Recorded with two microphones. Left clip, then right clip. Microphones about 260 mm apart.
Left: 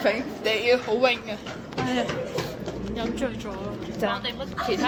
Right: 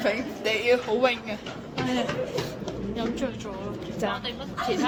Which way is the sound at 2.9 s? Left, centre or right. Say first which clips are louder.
Left 1 dB; centre.